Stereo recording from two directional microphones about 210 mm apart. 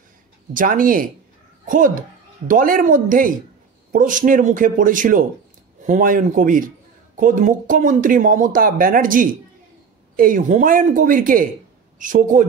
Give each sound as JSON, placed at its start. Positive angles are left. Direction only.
{"t": 0.5, "sound": "speech", "side_deg": -40}